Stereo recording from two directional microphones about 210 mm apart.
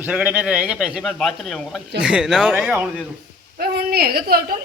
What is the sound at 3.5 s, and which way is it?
A woman's voice, 45° right (ahead or behind).